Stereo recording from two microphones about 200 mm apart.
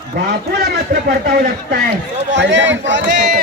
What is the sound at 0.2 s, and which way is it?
A man's voice, 50° right (ahead or behind).